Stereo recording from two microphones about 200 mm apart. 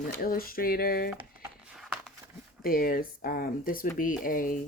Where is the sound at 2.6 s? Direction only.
45° left (ahead or behind).